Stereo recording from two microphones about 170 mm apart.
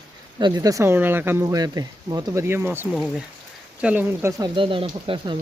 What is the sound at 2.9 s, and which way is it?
Speech, centre (ahead or behind).